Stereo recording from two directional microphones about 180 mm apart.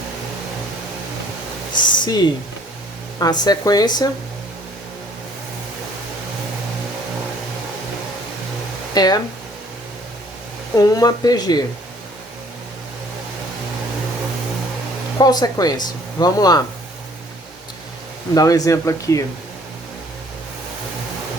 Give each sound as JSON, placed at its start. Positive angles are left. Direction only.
{"t": 1.8, "sound": "speech", "side_deg": 25}
{"t": 9.0, "sound": "speech", "side_deg": 20}
{"t": 10.8, "sound": "speech", "side_deg": 20}
{"t": 15.2, "sound": "speech", "side_deg": 20}
{"t": 18.3, "sound": "speech", "side_deg": 20}